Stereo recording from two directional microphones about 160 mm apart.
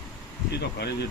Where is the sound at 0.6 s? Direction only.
90° left.